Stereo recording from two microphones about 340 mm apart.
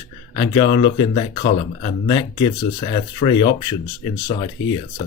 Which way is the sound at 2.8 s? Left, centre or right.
Centre.